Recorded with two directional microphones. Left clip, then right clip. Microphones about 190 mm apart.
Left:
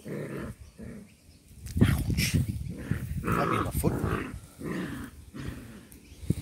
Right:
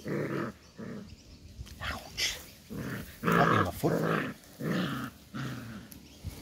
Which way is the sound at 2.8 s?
55° right (ahead or behind).